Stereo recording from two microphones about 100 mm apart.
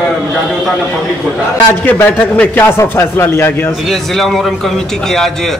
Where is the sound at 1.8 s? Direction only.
20° left (ahead or behind).